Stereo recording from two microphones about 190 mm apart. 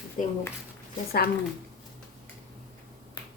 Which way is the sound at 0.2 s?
40° left (ahead or behind).